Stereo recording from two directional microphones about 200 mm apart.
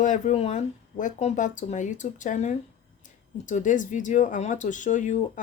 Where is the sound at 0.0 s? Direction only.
40° left (ahead or behind).